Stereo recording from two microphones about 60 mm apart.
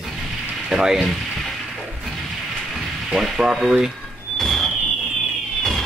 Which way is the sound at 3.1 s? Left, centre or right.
Centre.